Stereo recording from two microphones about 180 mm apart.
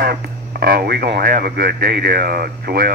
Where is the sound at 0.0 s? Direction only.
60° right (ahead or behind).